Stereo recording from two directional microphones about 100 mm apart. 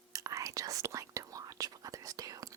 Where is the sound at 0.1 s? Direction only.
35° right (ahead or behind).